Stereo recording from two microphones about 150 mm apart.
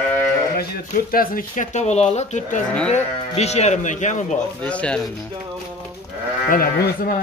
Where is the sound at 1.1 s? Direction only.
75° left (ahead or behind); by 4.4 s 55° left (ahead or behind).